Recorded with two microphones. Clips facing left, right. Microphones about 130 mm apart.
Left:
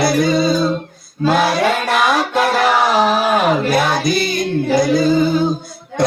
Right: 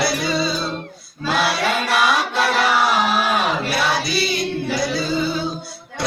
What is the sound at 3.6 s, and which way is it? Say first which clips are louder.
Music: left 6 dB; 50° left (ahead or behind).